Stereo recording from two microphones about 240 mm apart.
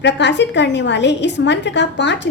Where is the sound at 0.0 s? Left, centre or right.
Left.